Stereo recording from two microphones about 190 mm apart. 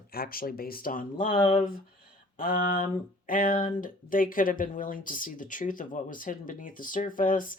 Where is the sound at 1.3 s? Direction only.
30° left (ahead or behind).